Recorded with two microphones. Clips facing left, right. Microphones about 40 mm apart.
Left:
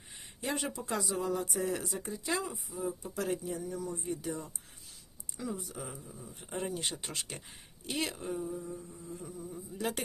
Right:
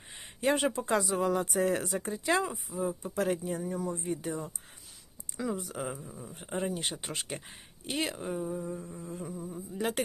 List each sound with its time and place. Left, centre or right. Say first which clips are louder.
0.1 s speech: right 8 dB; right
5.4 s speech: right 5 dB; right
6.0 s speech: right 4 dB; right
6.7 s speech: right 3 dB; centre
8.4 s speech: right 3 dB; right
9.2 s speech: right 4 dB; right
9.5 s speech: right 2 dB; right